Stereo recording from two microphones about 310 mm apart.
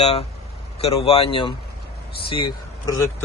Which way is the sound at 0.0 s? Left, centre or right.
Centre.